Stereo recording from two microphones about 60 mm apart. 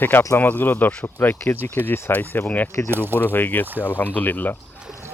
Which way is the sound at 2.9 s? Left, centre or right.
Right.